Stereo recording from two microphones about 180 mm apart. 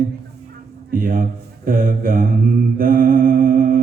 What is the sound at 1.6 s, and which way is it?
Mantra, 50° right (ahead or behind).